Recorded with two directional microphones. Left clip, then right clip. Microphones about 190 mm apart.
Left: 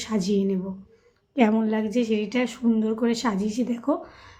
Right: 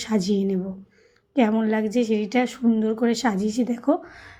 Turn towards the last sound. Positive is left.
turn(degrees=-25)  # may be behind; listen again after turning